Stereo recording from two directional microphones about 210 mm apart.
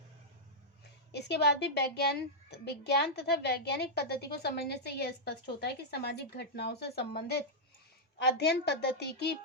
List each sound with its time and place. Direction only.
1.1 s a child's voice: 55° left (ahead or behind)